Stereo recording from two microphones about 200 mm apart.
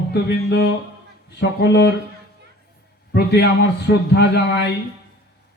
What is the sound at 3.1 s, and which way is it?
Speech, 55° left (ahead or behind).